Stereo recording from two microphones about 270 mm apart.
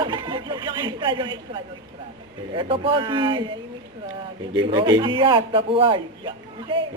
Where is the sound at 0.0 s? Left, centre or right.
Centre.